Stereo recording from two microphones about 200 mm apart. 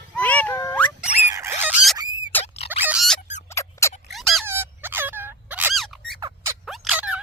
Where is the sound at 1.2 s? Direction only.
15° right (ahead or behind).